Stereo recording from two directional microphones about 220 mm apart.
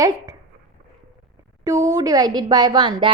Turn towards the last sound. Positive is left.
turn(degrees=-20)  # may be behind; listen again after turning